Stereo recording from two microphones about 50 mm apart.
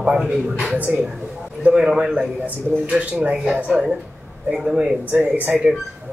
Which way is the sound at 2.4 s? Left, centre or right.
Right.